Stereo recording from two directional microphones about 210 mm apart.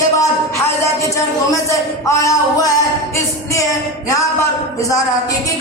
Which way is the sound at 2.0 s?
15° left (ahead or behind).